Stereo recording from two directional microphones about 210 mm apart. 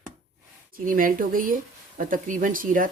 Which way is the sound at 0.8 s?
40° right (ahead or behind).